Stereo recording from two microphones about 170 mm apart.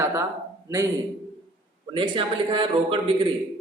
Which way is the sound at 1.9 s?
30° right (ahead or behind).